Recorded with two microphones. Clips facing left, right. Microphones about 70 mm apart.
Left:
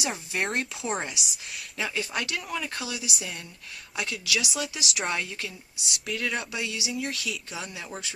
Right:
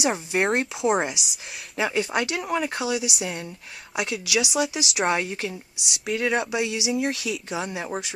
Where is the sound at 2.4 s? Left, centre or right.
Right.